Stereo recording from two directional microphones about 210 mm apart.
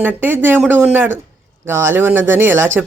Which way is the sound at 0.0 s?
10° right (ahead or behind).